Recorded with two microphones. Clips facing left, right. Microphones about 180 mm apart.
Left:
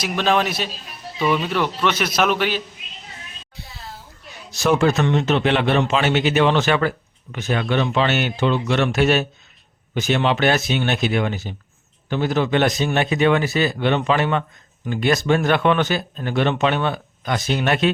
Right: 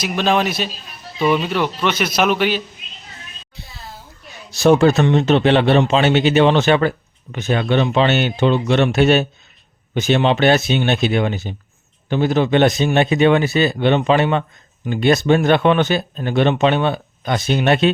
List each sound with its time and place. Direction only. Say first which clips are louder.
0.0 s speech: right 2 dB; centre (ahead or behind)
4.5 s a man's voice: right 5 dB; 30° right (ahead or behind)